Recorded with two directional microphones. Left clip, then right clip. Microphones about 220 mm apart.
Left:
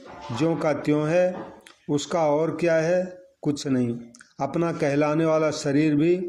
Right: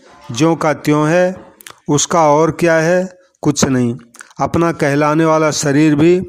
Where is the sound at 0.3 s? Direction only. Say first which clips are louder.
Right 10 dB; 40° right (ahead or behind).